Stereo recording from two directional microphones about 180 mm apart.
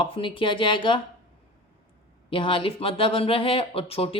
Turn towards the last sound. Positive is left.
turn(degrees=30)  # may be behind; listen again after turning